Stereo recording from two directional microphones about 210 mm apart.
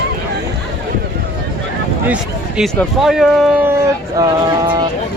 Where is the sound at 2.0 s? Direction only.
5° right (ahead or behind).